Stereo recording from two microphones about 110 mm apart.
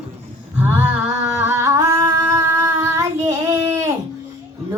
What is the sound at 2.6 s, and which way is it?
Child singing, 25° right (ahead or behind).